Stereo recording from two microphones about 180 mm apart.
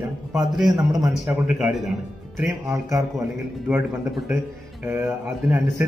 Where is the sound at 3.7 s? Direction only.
5° right (ahead or behind).